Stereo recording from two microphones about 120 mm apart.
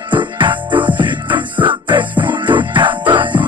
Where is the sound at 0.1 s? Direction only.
40° right (ahead or behind).